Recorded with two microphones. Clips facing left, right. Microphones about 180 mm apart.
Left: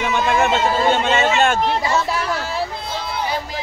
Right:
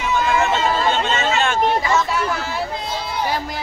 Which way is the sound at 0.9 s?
50° left (ahead or behind).